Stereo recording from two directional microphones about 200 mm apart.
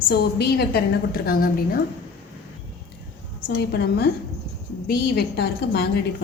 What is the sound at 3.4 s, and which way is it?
A woman's voice, 50° left (ahead or behind).